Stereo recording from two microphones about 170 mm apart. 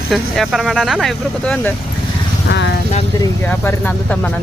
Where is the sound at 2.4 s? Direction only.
90° left.